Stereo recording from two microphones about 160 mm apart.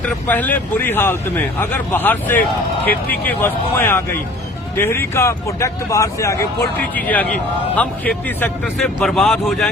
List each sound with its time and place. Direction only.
0.0 s speech: 10° left (ahead or behind)